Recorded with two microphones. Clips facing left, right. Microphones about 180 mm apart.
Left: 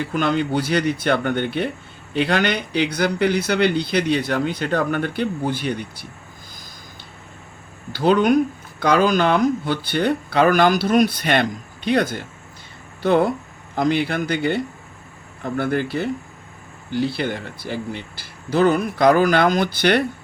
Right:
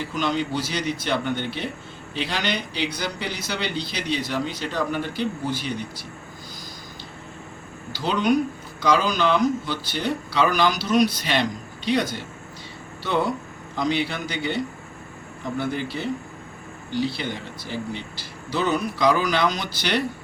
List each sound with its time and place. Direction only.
0.0 s speech: 55° left (ahead or behind)
7.9 s speech: 55° left (ahead or behind)